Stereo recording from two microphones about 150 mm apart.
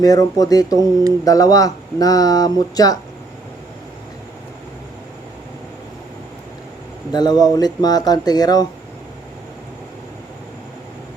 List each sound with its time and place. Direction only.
0.0 s speech: 25° left (ahead or behind)
0.8 s speech: 25° right (ahead or behind)
1.2 s speech: 25° left (ahead or behind)
7.1 s speech: 25° left (ahead or behind)